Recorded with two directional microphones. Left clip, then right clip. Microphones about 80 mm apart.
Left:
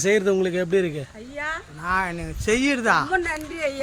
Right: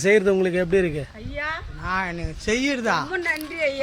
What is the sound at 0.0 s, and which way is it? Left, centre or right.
Speech, right.